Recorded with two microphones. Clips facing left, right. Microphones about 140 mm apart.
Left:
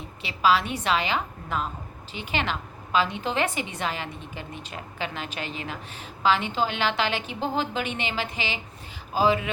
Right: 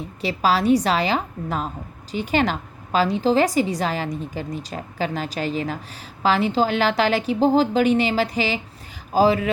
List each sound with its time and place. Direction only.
0.2 s a woman's voice: 40° right (ahead or behind)